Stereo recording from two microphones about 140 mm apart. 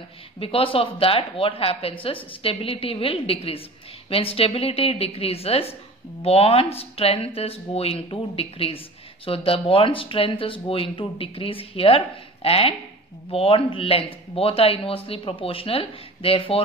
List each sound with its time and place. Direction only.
0.4 s speech: 40° left (ahead or behind)